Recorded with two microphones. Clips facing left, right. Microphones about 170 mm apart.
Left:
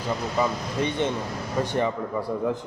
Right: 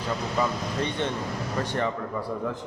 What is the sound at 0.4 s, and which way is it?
Speech, 15° left (ahead or behind).